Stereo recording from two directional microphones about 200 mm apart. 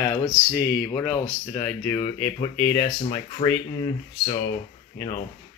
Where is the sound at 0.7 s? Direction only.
5° left (ahead or behind).